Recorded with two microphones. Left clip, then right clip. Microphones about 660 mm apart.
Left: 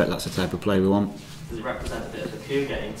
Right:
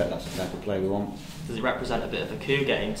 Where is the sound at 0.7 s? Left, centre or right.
Left.